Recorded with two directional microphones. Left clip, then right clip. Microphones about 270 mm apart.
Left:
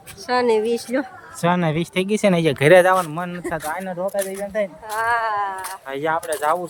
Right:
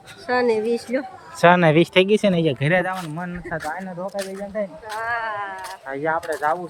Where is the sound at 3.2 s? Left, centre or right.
Centre.